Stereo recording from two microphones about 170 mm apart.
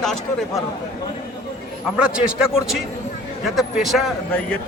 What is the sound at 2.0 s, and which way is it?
Speech, 5° right (ahead or behind).